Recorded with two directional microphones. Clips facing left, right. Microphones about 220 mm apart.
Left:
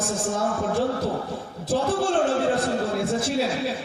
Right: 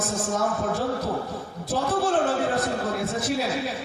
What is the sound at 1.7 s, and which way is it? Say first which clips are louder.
A man's voice: left 1 dB; 30° left (ahead or behind).